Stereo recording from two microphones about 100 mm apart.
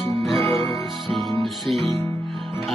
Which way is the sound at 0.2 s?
Centre (ahead or behind).